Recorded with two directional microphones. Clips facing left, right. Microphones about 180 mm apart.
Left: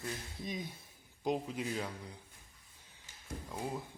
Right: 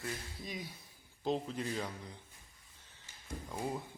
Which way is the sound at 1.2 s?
10° left (ahead or behind).